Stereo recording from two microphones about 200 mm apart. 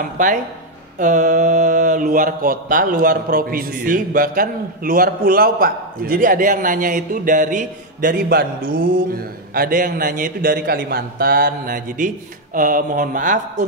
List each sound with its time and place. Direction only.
0.0 s speech: 40° right (ahead or behind)
0.9 s mantra: 40° right (ahead or behind)